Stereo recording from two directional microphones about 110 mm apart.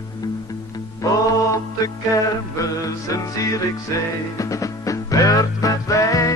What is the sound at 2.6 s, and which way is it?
Music, 30° left (ahead or behind).